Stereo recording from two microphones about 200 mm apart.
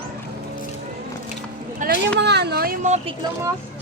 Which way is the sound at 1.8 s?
40° right (ahead or behind).